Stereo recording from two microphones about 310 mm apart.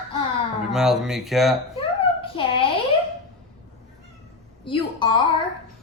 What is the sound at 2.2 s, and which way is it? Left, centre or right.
Speech, centre.